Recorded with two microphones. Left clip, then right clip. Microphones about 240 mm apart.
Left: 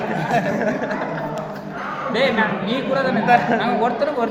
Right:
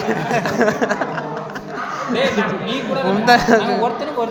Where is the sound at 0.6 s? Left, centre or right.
Right.